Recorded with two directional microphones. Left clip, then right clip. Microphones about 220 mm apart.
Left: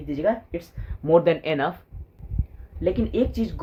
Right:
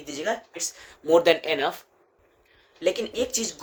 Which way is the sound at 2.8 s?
20° right (ahead or behind).